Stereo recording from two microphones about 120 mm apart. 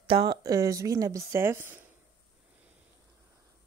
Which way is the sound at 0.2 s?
30° right (ahead or behind).